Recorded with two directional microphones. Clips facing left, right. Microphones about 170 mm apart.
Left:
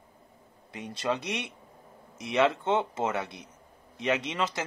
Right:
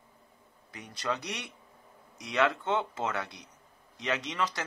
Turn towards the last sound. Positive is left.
turn(degrees=25)  # may be behind; listen again after turning